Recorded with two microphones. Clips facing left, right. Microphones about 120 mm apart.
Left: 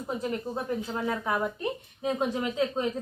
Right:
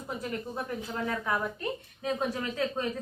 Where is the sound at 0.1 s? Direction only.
20° left (ahead or behind).